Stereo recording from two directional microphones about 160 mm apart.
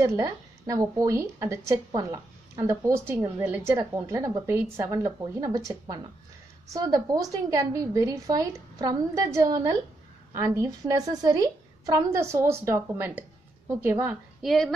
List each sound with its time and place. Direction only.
0.0 s speech: 20° right (ahead or behind)
14.4 s a woman's voice: centre (ahead or behind)